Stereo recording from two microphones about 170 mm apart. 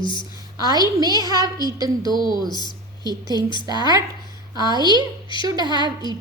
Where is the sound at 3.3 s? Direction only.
25° left (ahead or behind).